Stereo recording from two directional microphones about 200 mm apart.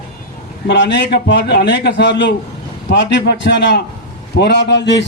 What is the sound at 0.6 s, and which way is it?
A man's voice, 65° left (ahead or behind).